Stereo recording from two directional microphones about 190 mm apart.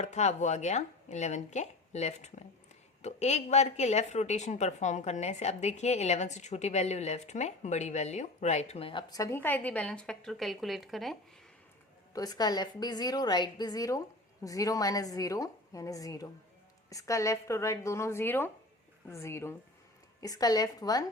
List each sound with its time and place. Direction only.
0.0 s a woman's voice: 35° left (ahead or behind); by 11.2 s centre (ahead or behind)
12.1 s a woman's voice: 20° left (ahead or behind)